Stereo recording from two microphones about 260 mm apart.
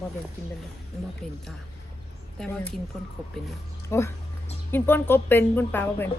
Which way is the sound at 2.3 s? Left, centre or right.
Centre.